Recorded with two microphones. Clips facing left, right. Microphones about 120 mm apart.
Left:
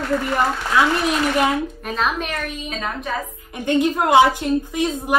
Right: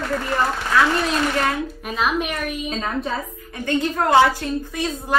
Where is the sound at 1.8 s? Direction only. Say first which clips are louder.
Right 1 dB; 5° right (ahead or behind).